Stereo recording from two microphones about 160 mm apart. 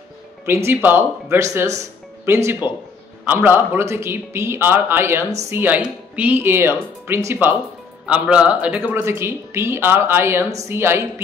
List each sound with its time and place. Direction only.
0.7 s speech: 10° right (ahead or behind)
1.8 s music: 15° right (ahead or behind)
3.3 s speech: 15° right (ahead or behind)